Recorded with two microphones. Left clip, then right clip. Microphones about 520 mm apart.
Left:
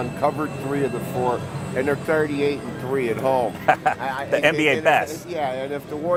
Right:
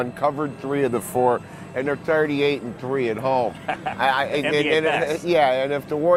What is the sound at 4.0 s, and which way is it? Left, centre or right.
Speech, right.